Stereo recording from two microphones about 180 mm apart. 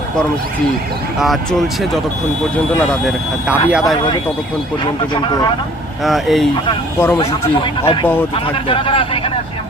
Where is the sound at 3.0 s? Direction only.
5° right (ahead or behind).